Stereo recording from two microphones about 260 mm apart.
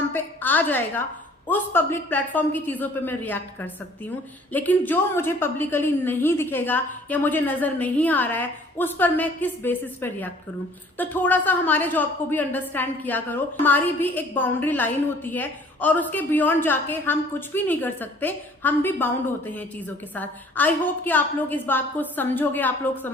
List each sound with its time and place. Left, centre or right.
0.1 s a woman's voice: centre